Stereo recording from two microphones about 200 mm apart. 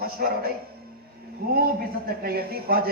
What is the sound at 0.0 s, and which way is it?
Speech, 50° right (ahead or behind).